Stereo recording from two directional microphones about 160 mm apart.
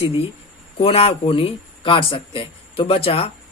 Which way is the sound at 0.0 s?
30° left (ahead or behind).